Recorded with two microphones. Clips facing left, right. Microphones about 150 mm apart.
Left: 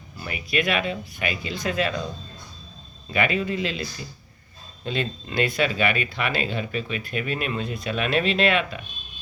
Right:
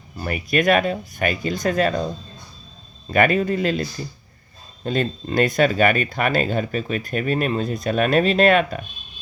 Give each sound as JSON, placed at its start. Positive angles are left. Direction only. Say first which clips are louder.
{"t": 0.2, "sound": "speech", "louder": "right 5 dB", "side_deg": -50}
{"t": 3.1, "sound": "speech", "louder": "right 6 dB", "side_deg": -50}